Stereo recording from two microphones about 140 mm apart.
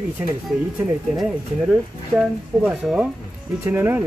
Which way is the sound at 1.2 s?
Centre (ahead or behind).